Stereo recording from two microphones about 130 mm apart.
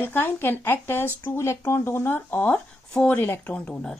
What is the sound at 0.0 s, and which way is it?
A woman's voice, 15° left (ahead or behind).